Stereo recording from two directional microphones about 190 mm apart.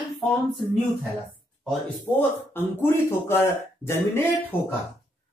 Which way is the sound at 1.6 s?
Centre (ahead or behind).